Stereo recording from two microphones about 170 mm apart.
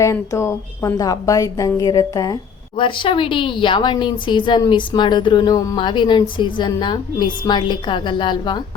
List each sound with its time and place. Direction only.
0.0 s a woman's voice: 15° left (ahead or behind)